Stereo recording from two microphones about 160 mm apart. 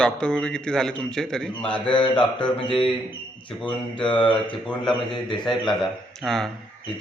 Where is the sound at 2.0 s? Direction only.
30° left (ahead or behind).